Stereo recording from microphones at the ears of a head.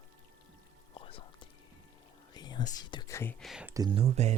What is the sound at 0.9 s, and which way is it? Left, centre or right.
Whispering, left.